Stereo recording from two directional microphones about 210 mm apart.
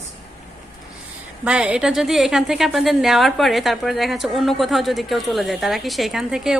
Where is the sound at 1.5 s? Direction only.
5° right (ahead or behind).